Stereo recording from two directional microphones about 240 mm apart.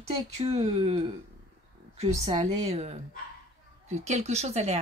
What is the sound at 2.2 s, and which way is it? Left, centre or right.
Speech, right.